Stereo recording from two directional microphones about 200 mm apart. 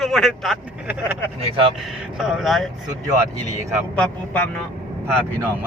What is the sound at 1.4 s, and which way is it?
Speech, 30° right (ahead or behind).